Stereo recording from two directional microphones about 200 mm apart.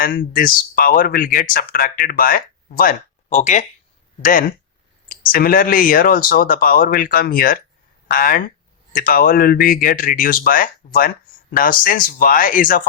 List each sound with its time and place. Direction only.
0.0 s speech: 45° left (ahead or behind)